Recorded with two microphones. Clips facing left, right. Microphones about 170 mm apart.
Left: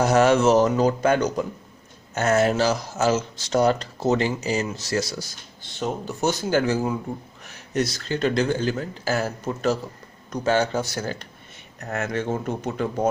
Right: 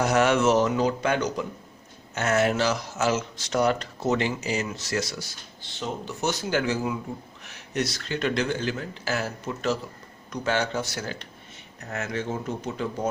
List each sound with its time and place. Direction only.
0.0 s speech: 35° left (ahead or behind)
11.9 s speech: 55° left (ahead or behind)